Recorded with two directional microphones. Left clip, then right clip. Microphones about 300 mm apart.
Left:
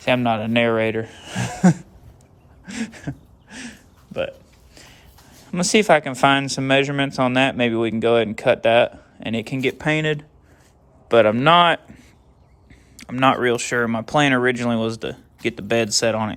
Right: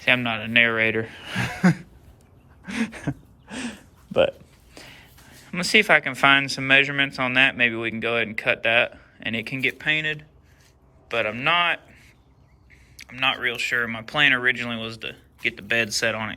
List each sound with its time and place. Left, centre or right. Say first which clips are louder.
0.0 s speech: left 2 dB; centre
2.6 s a sound: right 2 dB; centre
5.5 s a man's voice: left 2 dB; centre
13.0 s speech: left 6 dB; left